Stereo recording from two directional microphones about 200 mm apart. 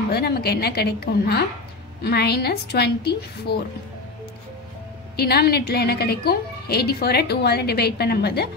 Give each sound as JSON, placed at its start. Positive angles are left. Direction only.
{"t": 0.1, "sound": "a woman's voice", "side_deg": 55}
{"t": 5.1, "sound": "a woman's voice", "side_deg": 55}